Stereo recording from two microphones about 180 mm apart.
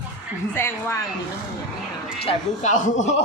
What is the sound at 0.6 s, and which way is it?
Speech, 15° left (ahead or behind).